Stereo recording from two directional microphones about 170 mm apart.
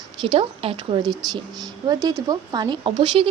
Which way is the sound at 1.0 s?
25° right (ahead or behind).